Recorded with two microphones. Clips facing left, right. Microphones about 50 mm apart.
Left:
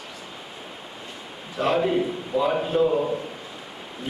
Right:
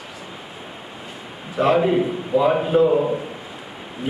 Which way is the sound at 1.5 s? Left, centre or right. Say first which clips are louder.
Right 5 dB; centre.